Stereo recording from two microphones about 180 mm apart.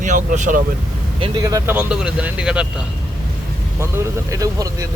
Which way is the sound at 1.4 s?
15° right (ahead or behind).